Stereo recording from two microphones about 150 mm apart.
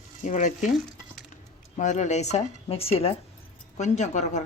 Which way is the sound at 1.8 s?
55° left (ahead or behind).